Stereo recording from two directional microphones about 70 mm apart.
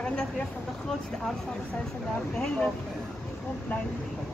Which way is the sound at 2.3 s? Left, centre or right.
Centre.